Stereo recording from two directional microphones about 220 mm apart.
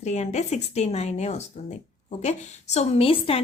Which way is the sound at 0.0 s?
30° left (ahead or behind).